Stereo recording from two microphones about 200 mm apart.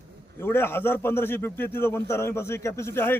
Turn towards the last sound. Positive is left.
turn(degrees=10)  # may be behind; listen again after turning